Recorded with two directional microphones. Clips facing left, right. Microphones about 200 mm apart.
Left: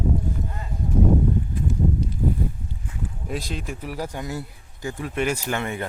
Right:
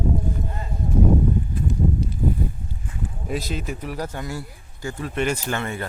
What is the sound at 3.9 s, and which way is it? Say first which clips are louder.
Speech: left 2 dB; 10° left (ahead or behind).